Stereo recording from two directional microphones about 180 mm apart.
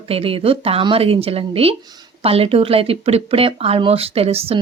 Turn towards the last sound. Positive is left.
turn(degrees=-35)  # may be behind; listen again after turning